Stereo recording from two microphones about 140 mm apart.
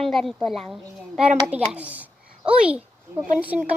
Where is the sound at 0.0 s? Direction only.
Centre (ahead or behind).